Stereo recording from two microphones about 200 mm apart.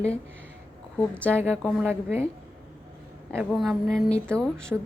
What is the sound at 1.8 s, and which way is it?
Speech, 10° right (ahead or behind).